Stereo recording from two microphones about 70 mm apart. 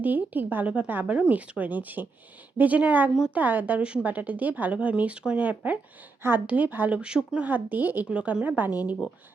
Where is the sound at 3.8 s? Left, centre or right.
Centre.